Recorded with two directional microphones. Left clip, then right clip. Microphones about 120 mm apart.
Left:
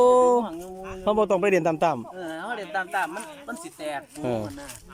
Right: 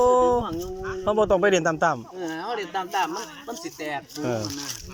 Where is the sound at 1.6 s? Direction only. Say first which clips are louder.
Right 1 dB; 25° left (ahead or behind).